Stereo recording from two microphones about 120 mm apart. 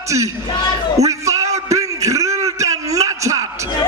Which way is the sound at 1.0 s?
25° right (ahead or behind).